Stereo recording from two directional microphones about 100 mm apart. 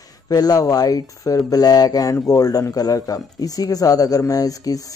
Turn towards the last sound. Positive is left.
turn(degrees=35)  # may be behind; listen again after turning